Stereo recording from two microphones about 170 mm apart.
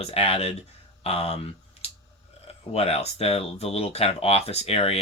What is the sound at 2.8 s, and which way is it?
Speech, 35° left (ahead or behind).